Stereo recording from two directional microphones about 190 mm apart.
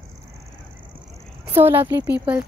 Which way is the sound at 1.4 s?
10° right (ahead or behind).